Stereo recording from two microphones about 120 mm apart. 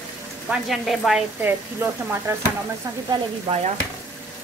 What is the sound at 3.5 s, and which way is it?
Stir, 55° right (ahead or behind).